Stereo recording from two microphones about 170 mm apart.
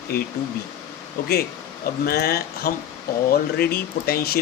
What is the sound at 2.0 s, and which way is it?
Speech, 65° left (ahead or behind).